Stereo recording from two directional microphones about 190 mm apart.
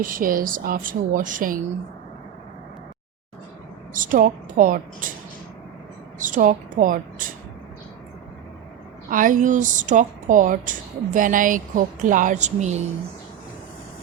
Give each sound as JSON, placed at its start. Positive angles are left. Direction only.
{"t": 0.0, "sound": "speech", "side_deg": -45}
{"t": 3.9, "sound": "speech", "side_deg": -45}
{"t": 6.1, "sound": "a woman's voice", "side_deg": -45}
{"t": 9.0, "sound": "speech", "side_deg": -45}